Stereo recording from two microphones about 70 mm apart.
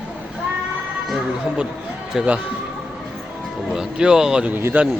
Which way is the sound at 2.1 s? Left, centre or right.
Centre.